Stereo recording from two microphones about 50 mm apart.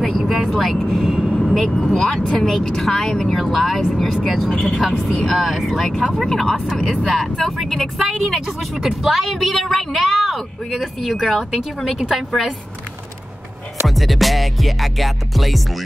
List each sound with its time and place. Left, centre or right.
0.0 s vehicle: centre
0.8 s speech: centre
1.3 s speech: centre
4.5 s a woman's voice: centre
13.8 s speech: centre